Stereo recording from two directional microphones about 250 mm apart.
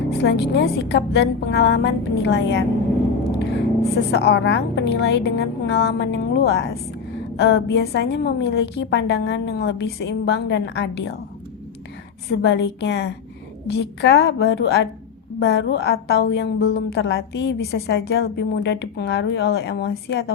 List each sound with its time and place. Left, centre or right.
0.2 s a woman's voice: left
4.1 s a woman's voice: left
12.3 s a woman's voice: left